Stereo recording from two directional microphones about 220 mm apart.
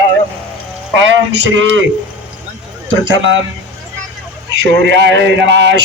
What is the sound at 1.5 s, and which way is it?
Music, 60° right (ahead or behind).